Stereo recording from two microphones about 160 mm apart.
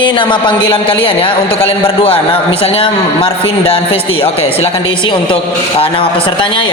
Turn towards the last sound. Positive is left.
turn(degrees=30)  # may be behind; listen again after turning